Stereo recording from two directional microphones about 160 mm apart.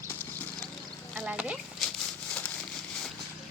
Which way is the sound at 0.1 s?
10° left (ahead or behind).